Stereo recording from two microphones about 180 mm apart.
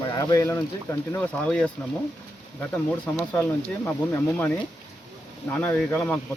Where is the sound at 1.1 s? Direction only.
5° left (ahead or behind).